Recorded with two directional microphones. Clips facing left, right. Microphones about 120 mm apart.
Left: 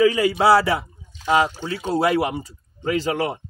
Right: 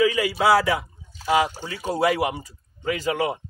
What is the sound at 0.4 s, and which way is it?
Speech, 30° left (ahead or behind).